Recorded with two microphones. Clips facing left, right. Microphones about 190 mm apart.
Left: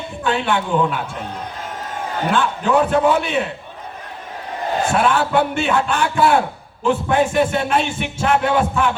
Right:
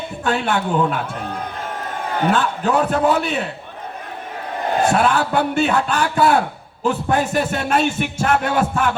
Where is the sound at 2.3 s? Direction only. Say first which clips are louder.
Left 4 dB; 40° right (ahead or behind).